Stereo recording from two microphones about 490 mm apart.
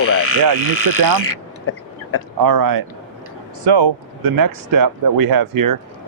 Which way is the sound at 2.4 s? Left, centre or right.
Right.